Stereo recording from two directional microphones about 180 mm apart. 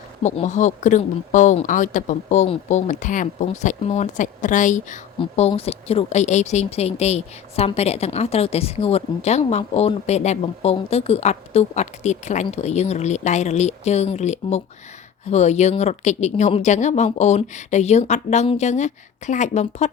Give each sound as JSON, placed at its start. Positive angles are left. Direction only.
{"t": 0.2, "sound": "speech", "side_deg": 40}
{"t": 5.2, "sound": "speech", "side_deg": 35}